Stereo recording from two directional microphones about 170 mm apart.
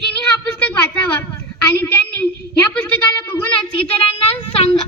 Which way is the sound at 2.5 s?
10° left (ahead or behind).